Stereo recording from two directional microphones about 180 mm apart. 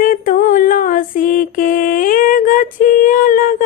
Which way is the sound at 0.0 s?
50° left (ahead or behind).